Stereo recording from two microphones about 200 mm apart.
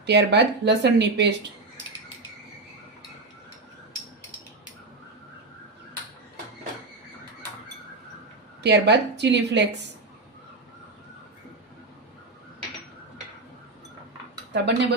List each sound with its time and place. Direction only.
0.0 s speech: 60° right (ahead or behind)
8.6 s speech: 60° right (ahead or behind)
14.5 s speech: 60° right (ahead or behind)